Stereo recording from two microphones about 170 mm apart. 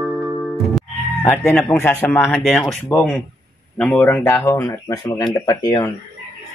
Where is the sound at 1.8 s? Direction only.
10° left (ahead or behind).